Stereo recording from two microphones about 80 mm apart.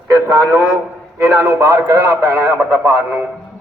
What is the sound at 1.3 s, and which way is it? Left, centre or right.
A man's voice, right.